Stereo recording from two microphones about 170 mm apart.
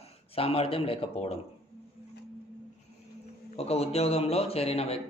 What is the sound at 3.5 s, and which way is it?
A man's voice, 35° left (ahead or behind).